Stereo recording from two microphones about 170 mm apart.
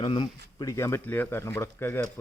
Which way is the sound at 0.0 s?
30° left (ahead or behind).